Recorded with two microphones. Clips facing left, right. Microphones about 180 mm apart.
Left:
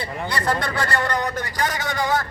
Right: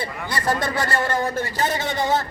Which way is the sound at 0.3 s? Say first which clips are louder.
Right 1 dB; 20° right (ahead or behind).